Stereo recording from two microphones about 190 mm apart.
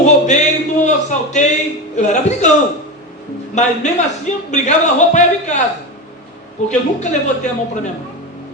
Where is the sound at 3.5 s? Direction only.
40° left (ahead or behind).